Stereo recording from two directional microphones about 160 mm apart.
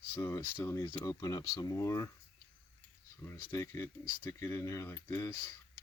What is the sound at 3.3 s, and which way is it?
Speech, 20° left (ahead or behind).